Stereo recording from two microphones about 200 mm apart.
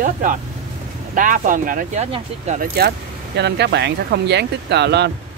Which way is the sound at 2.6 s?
55° right (ahead or behind).